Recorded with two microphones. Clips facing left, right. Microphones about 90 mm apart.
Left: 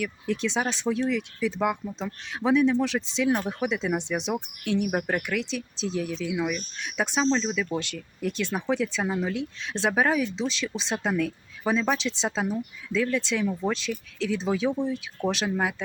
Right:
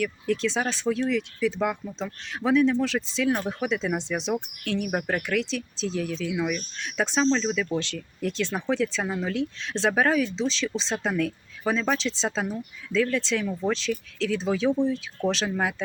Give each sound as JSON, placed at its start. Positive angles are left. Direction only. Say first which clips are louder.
{"t": 0.0, "sound": "speech", "louder": "right 2 dB", "side_deg": 15}